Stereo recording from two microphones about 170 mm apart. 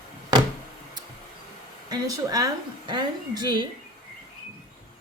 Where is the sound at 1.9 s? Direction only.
25° right (ahead or behind).